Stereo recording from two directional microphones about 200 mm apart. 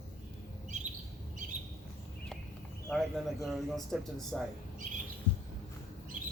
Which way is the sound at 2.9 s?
Centre (ahead or behind).